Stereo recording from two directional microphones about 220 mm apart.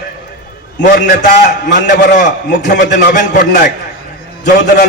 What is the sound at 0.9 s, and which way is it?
A man's voice, 35° left (ahead or behind).